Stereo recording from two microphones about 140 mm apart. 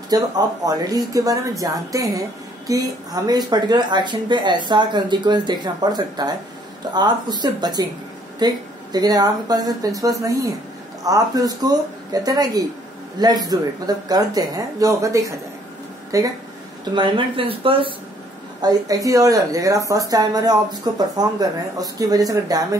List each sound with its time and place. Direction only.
0.1 s a woman's voice: 25° right (ahead or behind)
16.9 s speech: 40° right (ahead or behind)
18.6 s a woman's voice: 25° right (ahead or behind)